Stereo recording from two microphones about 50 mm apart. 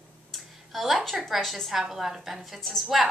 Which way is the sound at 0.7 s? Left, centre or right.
Centre.